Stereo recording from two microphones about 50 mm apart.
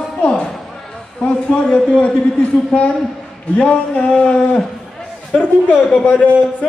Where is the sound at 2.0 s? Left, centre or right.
Left.